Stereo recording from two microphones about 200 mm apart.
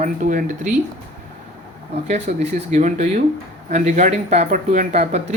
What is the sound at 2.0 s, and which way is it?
Speech, 35° right (ahead or behind).